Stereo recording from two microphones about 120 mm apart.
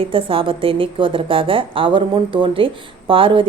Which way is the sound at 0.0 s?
50° right (ahead or behind).